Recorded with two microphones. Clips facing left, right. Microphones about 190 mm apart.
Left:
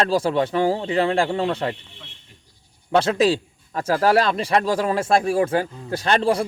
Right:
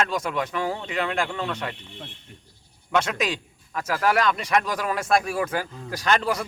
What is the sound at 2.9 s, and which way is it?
A man's voice, 30° left (ahead or behind).